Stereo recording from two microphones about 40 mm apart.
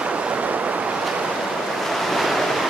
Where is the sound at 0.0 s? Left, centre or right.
Right.